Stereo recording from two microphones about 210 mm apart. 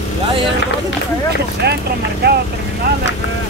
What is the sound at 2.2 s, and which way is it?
Speech, 50° right (ahead or behind).